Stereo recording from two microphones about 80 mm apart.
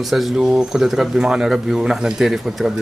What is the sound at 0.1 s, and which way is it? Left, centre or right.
Speech, centre.